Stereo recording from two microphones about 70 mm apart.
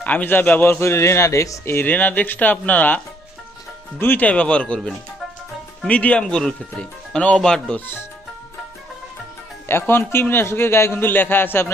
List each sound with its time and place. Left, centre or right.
0.0 s a man's voice: left
1.7 s a man's voice: left
4.3 s speech: centre
5.9 s speech: left
9.6 s a man's voice: left